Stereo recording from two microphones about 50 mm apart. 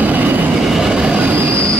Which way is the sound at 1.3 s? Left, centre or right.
Right.